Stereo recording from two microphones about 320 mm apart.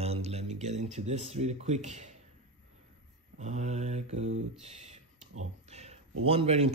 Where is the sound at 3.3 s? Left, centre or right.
Right.